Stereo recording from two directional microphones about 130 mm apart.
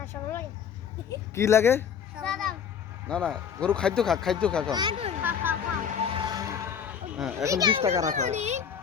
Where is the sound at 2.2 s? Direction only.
5° left (ahead or behind).